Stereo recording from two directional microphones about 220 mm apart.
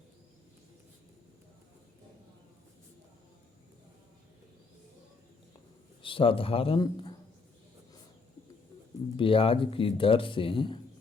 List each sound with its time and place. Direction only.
6.0 s speech: 25° left (ahead or behind)
9.1 s speech: 25° left (ahead or behind)